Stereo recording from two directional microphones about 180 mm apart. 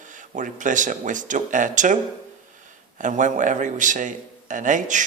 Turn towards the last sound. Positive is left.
turn(degrees=-45)  # may be behind; listen again after turning